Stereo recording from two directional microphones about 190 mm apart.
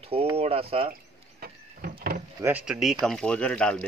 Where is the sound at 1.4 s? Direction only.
50° right (ahead or behind).